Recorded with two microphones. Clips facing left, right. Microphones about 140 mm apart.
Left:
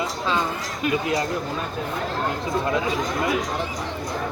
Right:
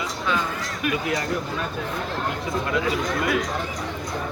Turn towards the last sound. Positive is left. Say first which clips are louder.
# even
turn(degrees=25)  # may be behind; listen again after turning